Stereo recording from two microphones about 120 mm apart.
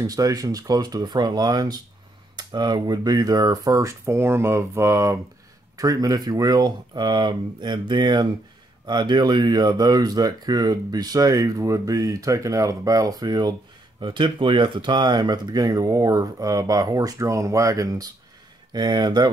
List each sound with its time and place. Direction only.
0.0 s speech: 30° right (ahead or behind)